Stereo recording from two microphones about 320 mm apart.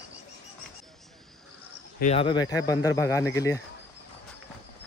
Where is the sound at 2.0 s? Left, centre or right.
Centre.